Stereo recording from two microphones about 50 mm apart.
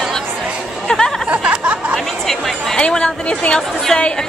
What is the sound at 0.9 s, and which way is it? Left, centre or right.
Chatter, centre.